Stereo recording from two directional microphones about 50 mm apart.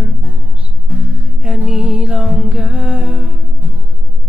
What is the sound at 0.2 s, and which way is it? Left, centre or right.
Music, right.